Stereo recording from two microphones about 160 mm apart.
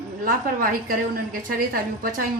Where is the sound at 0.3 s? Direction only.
60° right (ahead or behind).